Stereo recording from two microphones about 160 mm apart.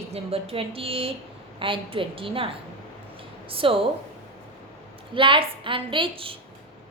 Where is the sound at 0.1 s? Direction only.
40° right (ahead or behind).